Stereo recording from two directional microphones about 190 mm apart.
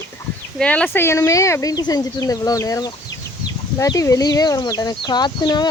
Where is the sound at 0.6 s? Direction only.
5° left (ahead or behind).